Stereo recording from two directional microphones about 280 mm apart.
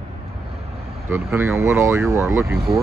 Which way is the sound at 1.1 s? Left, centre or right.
Centre.